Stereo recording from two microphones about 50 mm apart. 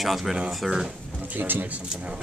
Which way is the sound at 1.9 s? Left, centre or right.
Right.